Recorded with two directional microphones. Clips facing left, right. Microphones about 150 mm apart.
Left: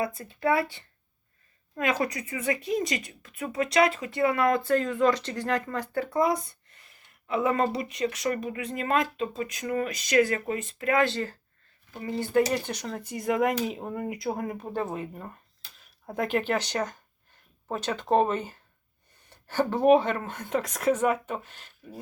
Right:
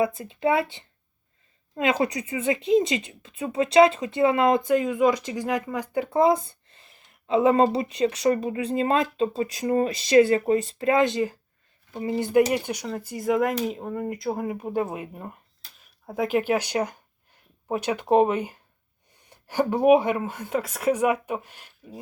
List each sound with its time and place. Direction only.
0.0 s speech: 20° right (ahead or behind)